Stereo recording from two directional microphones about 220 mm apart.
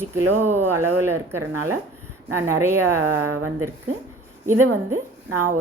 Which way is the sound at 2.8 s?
90° right.